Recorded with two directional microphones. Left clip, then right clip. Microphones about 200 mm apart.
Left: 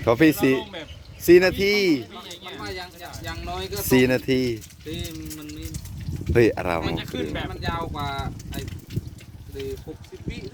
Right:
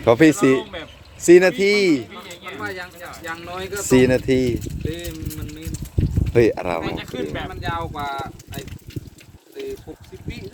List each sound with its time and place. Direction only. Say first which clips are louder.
0.0 s speech: right 4 dB; 15° right (ahead or behind)
2.4 s speech: right 5 dB; 5° left (ahead or behind)
3.8 s speech: right 4 dB; 5° right (ahead or behind)
5.0 s speech: right 3 dB; 30° right (ahead or behind)
6.3 s speech: right 2 dB; 5° right (ahead or behind)
7.0 s speech: right 2 dB; 15° right (ahead or behind)
7.3 s speech: right 2 dB; centre (ahead or behind)